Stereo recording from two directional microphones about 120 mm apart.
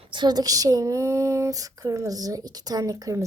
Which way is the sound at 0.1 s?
40° right (ahead or behind).